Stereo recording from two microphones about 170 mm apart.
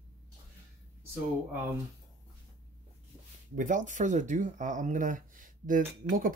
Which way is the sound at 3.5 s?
50° right (ahead or behind).